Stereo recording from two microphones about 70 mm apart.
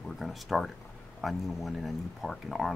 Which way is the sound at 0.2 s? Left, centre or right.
Centre.